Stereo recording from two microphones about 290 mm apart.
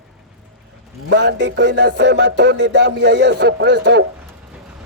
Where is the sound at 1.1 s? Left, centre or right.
Right.